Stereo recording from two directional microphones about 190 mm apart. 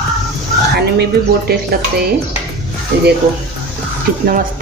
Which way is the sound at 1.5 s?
55° right (ahead or behind).